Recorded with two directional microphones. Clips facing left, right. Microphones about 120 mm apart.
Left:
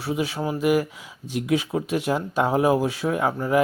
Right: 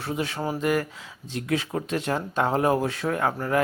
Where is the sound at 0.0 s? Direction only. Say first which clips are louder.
Left 3 dB; 10° left (ahead or behind).